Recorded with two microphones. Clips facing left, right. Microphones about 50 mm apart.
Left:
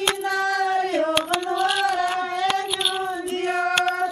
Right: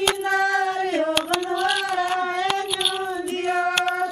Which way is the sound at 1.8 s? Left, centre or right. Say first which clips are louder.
Even; centre.